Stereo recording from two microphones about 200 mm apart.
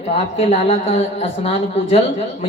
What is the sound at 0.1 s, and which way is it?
Speech, 30° left (ahead or behind).